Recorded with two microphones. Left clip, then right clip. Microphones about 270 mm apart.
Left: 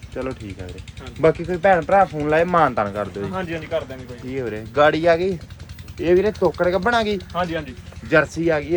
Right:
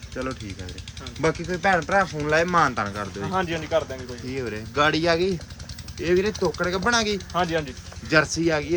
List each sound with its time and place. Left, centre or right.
0.1 s speech: centre
3.3 s speech: right
4.3 s speech: centre